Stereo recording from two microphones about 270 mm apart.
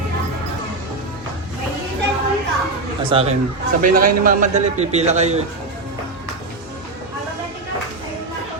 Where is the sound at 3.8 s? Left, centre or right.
Right.